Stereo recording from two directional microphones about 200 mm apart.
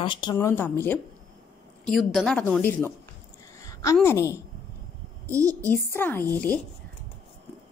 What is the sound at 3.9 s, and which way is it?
Speech, 15° left (ahead or behind).